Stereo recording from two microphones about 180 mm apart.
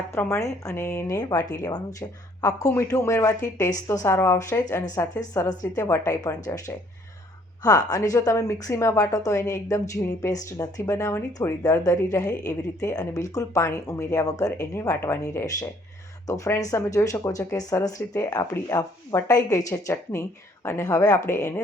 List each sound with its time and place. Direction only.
0.1 s a woman's voice: 15° left (ahead or behind)